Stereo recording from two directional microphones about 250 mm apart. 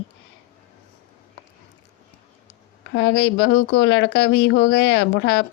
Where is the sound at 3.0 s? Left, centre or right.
Left.